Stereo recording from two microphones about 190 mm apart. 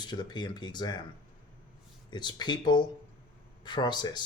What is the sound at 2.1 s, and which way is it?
Speech, 25° left (ahead or behind).